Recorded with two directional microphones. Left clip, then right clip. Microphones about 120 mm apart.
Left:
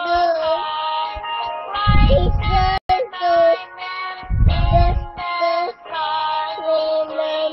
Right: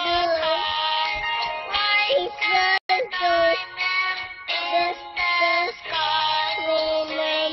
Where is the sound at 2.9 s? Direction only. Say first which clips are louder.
Left 4 dB; 25° right (ahead or behind).